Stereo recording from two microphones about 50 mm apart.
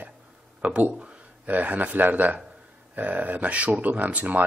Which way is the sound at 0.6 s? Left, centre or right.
Right.